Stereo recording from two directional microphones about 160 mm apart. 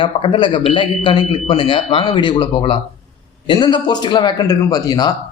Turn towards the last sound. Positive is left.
turn(degrees=25)  # may be behind; listen again after turning